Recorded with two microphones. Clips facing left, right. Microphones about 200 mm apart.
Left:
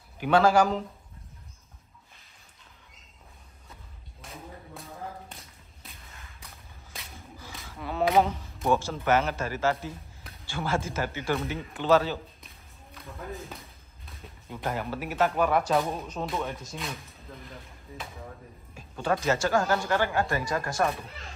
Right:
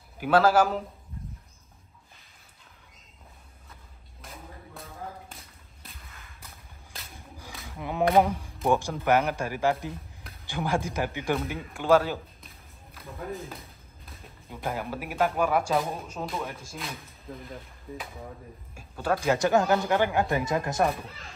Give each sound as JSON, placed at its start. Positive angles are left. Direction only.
{"t": 0.2, "sound": "speech", "side_deg": -5}
{"t": 4.2, "sound": "music", "side_deg": 0}
{"t": 5.3, "sound": "a sound", "side_deg": 0}
{"t": 6.4, "sound": "whip", "side_deg": 0}
{"t": 7.2, "sound": "a sound", "side_deg": -15}
{"t": 8.2, "sound": "speech", "side_deg": -10}
{"t": 12.4, "sound": "a sound", "side_deg": 0}
{"t": 14.0, "sound": "speech", "side_deg": 0}
{"t": 18.8, "sound": "speech", "side_deg": -5}